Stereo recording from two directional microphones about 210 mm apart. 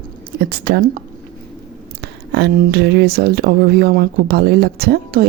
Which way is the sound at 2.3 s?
55° right (ahead or behind).